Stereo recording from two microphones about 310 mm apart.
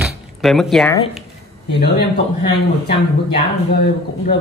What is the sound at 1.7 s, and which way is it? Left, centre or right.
Speech, left.